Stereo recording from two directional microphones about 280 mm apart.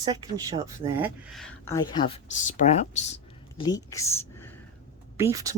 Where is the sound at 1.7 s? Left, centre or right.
Centre.